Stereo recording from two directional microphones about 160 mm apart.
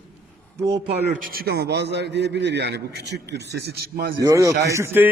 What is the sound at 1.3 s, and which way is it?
A man's voice, 80° right.